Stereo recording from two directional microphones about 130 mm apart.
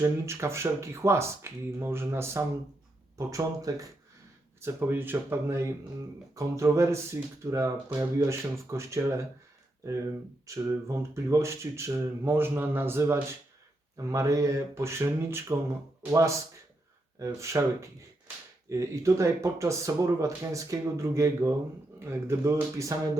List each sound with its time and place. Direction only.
0.0 s speech: 20° right (ahead or behind)
10.4 s speech: 25° right (ahead or behind)